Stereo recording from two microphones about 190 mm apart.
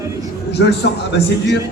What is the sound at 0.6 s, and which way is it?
Speech, 85° left.